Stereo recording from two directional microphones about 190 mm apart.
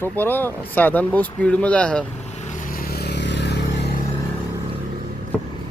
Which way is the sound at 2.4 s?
45° left (ahead or behind).